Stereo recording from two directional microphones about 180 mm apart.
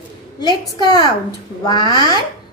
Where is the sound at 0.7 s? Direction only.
20° left (ahead or behind).